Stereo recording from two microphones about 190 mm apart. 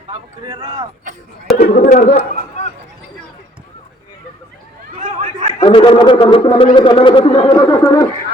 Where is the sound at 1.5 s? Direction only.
45° left (ahead or behind).